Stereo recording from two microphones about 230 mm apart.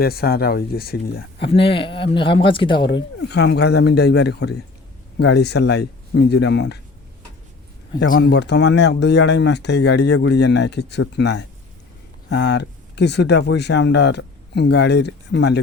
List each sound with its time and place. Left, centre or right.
0.0 s speech: left
1.5 s speech: left
2.8 s speech: left
7.9 s speech: left